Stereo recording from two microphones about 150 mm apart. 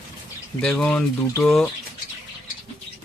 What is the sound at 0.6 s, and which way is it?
Speech, 10° left (ahead or behind).